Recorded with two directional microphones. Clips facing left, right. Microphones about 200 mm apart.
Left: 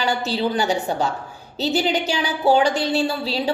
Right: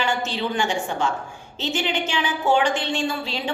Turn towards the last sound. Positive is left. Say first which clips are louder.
# left 4 dB
turn(degrees=35)  # may be behind; listen again after turning